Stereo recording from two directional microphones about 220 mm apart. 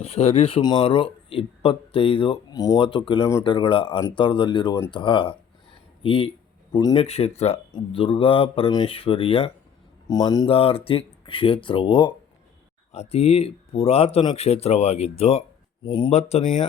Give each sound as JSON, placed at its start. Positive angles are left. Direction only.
{"t": 0.0, "sound": "speech", "side_deg": 25}